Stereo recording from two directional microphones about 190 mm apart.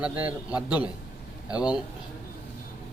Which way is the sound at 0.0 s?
5° right (ahead or behind).